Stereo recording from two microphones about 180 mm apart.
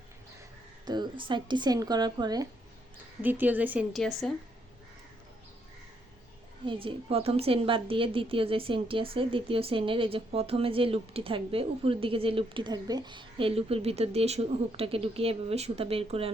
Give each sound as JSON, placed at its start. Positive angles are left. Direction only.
{"t": 0.9, "sound": "speech", "side_deg": -25}
{"t": 3.2, "sound": "speech", "side_deg": -10}
{"t": 3.9, "sound": "a woman's voice", "side_deg": 0}
{"t": 6.7, "sound": "a woman's voice", "side_deg": -30}